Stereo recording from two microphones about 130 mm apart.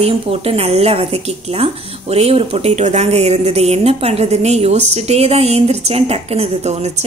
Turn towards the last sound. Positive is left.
turn(degrees=-50)  # may be behind; listen again after turning